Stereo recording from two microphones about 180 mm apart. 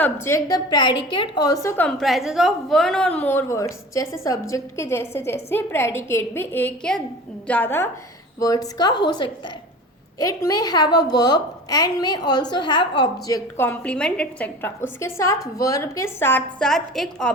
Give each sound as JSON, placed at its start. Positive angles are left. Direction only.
{"t": 0.0, "sound": "a woman's voice", "side_deg": 15}
{"t": 13.2, "sound": "a woman's voice", "side_deg": 15}